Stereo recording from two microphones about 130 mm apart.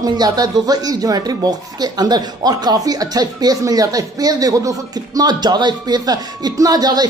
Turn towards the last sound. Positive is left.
turn(degrees=-30)  # may be behind; listen again after turning